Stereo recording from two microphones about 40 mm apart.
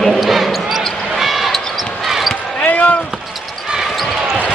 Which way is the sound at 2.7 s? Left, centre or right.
Left.